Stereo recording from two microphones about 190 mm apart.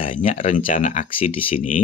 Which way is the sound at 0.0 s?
45° left (ahead or behind).